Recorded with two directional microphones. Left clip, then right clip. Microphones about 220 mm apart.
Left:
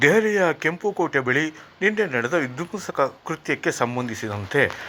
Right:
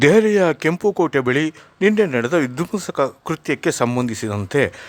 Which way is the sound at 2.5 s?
55° right (ahead or behind).